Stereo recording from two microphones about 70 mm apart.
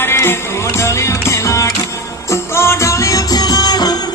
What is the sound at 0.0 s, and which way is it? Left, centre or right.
Music, left.